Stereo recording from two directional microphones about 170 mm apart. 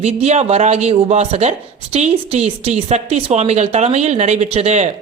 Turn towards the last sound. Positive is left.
turn(degrees=-40)  # may be behind; listen again after turning